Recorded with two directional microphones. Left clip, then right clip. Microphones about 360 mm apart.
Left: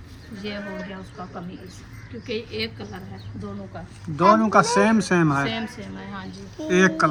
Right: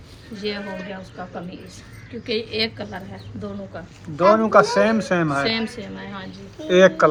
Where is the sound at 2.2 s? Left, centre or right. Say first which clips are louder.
Right 5 dB; centre.